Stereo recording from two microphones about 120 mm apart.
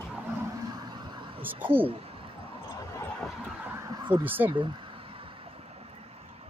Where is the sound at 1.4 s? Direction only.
15° right (ahead or behind).